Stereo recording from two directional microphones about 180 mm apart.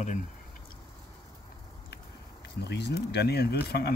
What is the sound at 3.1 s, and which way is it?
Speech, 65° left (ahead or behind).